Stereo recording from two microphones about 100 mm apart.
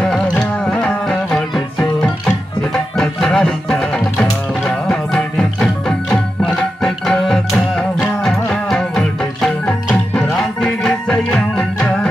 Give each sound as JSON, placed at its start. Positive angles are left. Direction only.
{"t": 0.4, "sound": "music", "side_deg": 10}